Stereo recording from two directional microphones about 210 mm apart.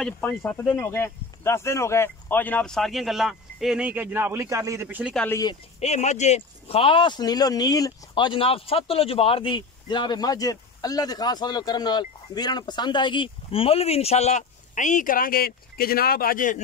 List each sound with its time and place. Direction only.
0.4 s speech: 10° left (ahead or behind); by 5.1 s 10° right (ahead or behind)
5.1 s speech: 5° left (ahead or behind)
5.8 s speech: 30° left (ahead or behind)